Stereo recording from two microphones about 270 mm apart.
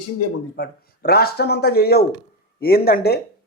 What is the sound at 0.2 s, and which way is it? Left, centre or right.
Speech, left.